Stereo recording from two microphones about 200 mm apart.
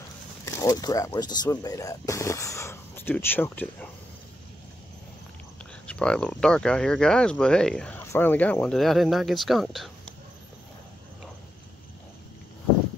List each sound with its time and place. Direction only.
0.6 s speech: 20° left (ahead or behind)
5.9 s speech: 5° left (ahead or behind)